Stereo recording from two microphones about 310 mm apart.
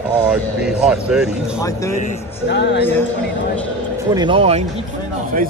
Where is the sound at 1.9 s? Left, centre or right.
Left.